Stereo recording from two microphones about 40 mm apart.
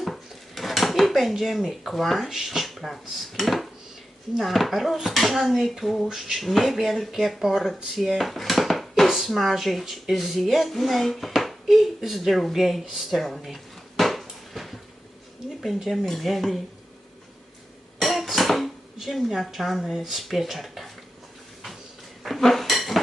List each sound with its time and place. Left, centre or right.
0.0 s speech: centre
6.1 s a sound: centre
6.3 s speech: centre
7.9 s dishes: centre
15.4 s speech: centre
18.0 s cough: centre
18.9 s speech: centre
22.2 s dishes: centre